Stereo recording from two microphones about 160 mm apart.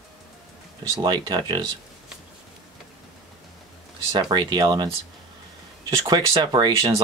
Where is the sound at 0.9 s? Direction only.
25° right (ahead or behind).